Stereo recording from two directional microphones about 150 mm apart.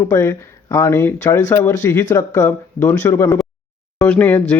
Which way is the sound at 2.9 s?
15° left (ahead or behind).